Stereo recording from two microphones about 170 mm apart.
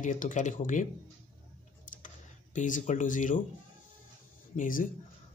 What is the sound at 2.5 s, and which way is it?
Speech, 50° left (ahead or behind).